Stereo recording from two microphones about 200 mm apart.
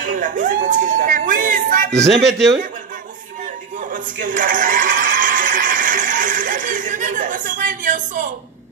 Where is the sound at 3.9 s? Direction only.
40° right (ahead or behind).